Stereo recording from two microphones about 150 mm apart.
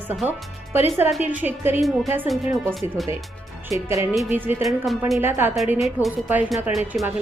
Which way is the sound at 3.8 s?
15° right (ahead or behind).